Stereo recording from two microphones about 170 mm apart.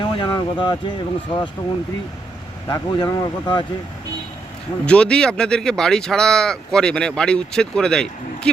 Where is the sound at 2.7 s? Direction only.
25° left (ahead or behind).